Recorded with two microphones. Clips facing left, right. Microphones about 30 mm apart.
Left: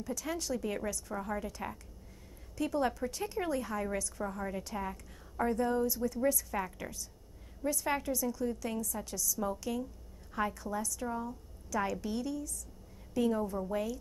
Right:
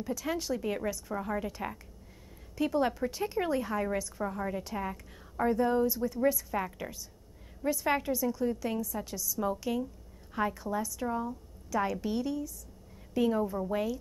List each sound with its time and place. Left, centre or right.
0.0 s a woman's voice: centre